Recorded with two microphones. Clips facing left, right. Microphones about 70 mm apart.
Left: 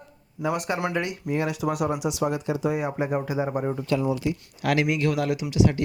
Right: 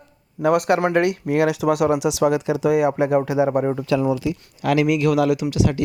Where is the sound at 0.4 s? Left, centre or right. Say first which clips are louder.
Right 9 dB; right.